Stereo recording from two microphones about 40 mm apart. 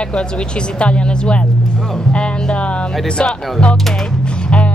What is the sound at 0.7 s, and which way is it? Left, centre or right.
Speech, left.